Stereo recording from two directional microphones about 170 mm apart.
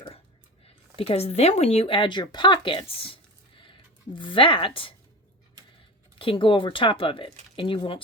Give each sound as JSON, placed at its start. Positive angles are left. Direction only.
{"t": 0.9, "sound": "speech", "side_deg": 35}
{"t": 6.1, "sound": "speech", "side_deg": 30}